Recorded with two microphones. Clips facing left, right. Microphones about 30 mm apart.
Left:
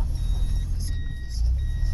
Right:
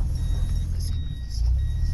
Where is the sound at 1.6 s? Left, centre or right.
Centre.